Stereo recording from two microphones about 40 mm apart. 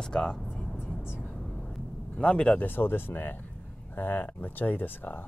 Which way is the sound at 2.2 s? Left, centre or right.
Left.